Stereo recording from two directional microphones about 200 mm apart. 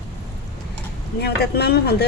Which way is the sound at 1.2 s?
55° left (ahead or behind).